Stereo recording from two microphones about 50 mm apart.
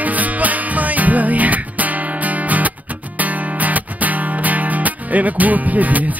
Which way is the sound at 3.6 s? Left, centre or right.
Right.